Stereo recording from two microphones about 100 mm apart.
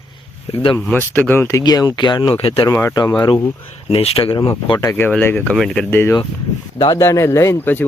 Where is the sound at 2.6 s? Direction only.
30° left (ahead or behind).